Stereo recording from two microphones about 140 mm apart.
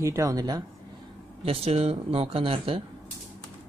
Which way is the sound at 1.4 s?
45° right (ahead or behind).